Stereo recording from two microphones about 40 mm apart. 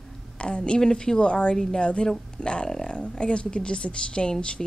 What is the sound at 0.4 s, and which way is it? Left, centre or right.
A woman's voice, left.